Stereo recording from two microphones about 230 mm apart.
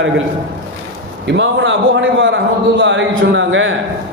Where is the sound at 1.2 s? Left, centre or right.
Right.